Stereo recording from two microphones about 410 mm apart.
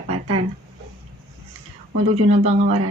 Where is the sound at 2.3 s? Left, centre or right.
Centre.